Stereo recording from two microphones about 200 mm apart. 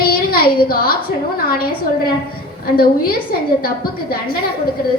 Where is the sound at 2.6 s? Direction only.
50° left (ahead or behind).